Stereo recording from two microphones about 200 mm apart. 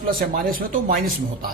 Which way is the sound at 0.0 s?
45° right (ahead or behind).